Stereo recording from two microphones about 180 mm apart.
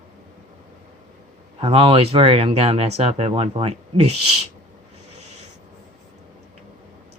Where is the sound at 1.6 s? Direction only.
30° right (ahead or behind).